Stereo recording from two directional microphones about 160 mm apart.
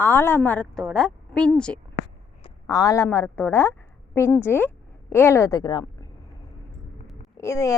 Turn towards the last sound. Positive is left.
turn(degrees=20)  # may be behind; listen again after turning